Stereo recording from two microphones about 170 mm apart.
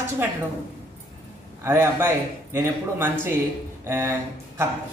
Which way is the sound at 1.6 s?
15° right (ahead or behind).